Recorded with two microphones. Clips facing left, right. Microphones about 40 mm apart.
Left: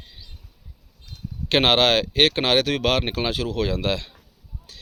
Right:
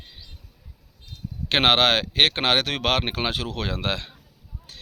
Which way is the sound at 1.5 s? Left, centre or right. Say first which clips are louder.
Left 1 dB; right.